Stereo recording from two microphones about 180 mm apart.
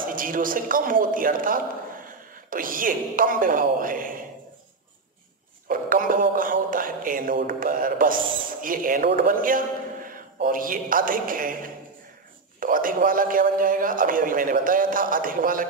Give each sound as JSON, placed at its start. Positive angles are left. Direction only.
{"t": 0.0, "sound": "a man's voice", "side_deg": -50}
{"t": 5.7, "sound": "a man's voice", "side_deg": -50}